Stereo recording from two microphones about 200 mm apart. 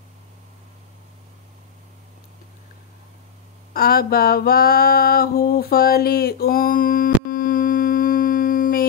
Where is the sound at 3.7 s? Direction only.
50° left (ahead or behind).